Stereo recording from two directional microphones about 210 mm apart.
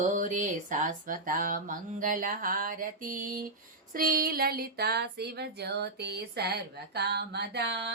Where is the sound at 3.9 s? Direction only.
45° right (ahead or behind).